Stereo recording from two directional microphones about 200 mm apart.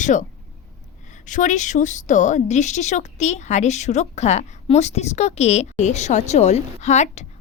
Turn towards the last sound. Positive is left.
turn(degrees=35)  # may be behind; listen again after turning